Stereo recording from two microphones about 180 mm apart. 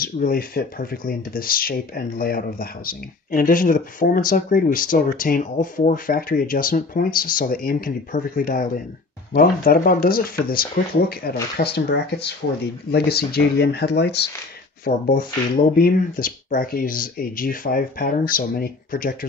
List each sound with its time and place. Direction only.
0.0 s speech: 55° left (ahead or behind); by 14.2 s 70° left (ahead or behind)
14.9 s speech: 50° left (ahead or behind)